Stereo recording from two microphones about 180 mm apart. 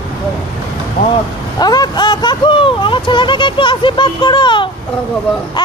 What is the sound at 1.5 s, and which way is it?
Speech, 20° left (ahead or behind).